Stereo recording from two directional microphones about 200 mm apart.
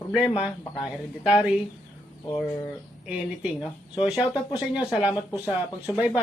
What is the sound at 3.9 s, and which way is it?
Speech, 5° right (ahead or behind).